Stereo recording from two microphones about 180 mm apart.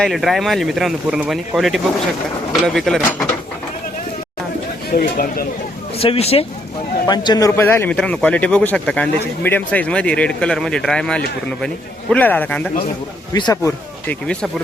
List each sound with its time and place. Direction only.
0.0 s speech: centre (ahead or behind)
4.9 s speech: 55° left (ahead or behind)
6.0 s a man's voice: 35° left (ahead or behind); by 12.6 s 10° left (ahead or behind)
13.3 s speech: 20° left (ahead or behind)